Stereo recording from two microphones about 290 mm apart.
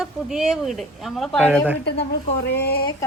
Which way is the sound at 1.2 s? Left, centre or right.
Centre.